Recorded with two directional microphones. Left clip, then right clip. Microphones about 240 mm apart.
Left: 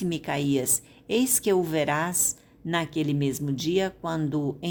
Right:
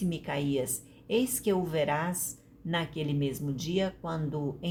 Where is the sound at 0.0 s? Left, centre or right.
Left.